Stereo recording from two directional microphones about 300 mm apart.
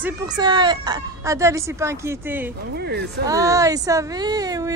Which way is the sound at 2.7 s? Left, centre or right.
Right.